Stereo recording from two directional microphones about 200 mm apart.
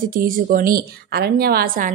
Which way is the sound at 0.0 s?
45° right (ahead or behind).